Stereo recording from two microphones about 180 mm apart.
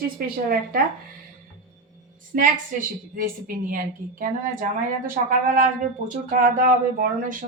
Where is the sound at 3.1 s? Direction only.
50° right (ahead or behind).